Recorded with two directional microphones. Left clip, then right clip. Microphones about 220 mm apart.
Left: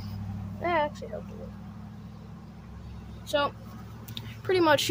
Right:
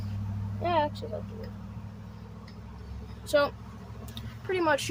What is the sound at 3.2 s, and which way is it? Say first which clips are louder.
Speech: right 2 dB; 10° right (ahead or behind).